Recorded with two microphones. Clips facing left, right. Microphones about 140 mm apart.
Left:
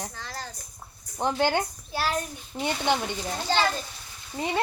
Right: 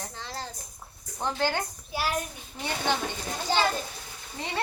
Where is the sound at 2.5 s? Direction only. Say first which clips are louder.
Left 7 dB; 40° left (ahead or behind).